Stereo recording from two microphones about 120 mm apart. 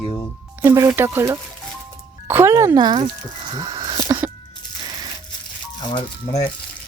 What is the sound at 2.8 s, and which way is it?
Speech, 40° right (ahead or behind).